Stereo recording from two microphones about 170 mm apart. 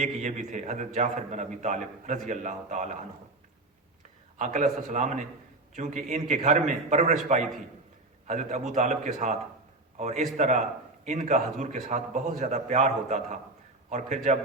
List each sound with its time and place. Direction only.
0.0 s a man's voice: 45° right (ahead or behind)
4.4 s a man's voice: 45° right (ahead or behind)
8.3 s a man's voice: 45° right (ahead or behind)